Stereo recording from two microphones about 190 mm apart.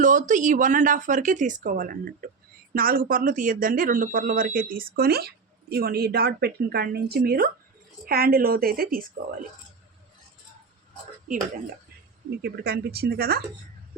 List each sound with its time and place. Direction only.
0.0 s speech: 40° right (ahead or behind)
12.4 s speech: 55° right (ahead or behind)